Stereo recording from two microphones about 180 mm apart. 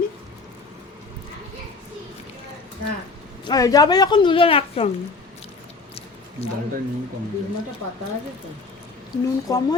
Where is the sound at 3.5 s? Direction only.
20° left (ahead or behind).